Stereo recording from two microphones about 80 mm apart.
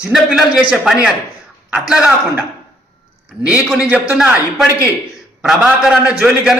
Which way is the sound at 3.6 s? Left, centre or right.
Centre.